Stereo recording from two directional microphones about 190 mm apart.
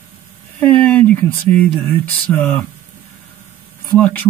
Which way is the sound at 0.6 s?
5° left (ahead or behind).